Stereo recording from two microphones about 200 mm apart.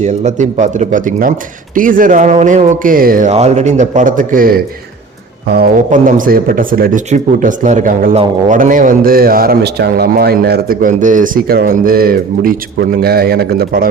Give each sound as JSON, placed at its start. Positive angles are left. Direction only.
{"t": 0.0, "sound": "a man's voice", "side_deg": -35}